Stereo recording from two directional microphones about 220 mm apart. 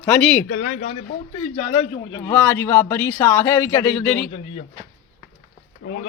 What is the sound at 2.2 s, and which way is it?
Speech, 10° left (ahead or behind).